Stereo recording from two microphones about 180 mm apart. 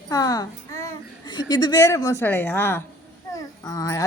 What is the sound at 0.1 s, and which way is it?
A child's voice, 20° left (ahead or behind).